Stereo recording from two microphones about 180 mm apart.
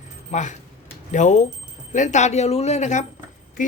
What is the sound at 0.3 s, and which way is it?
A woman's voice, 40° left (ahead or behind).